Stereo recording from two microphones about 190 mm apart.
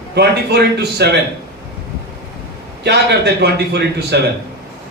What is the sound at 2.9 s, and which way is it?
Speech, 60° right (ahead or behind).